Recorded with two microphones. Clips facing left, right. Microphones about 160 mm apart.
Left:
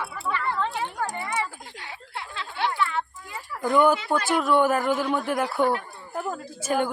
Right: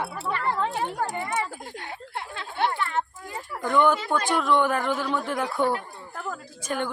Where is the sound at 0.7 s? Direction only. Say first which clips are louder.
Right 2 dB; 45° right (ahead or behind).